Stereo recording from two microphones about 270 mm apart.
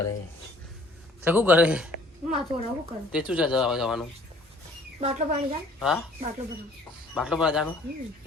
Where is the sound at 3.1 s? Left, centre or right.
Centre.